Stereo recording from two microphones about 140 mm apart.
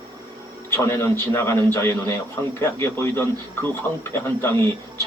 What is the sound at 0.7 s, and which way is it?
Speech, 20° left (ahead or behind).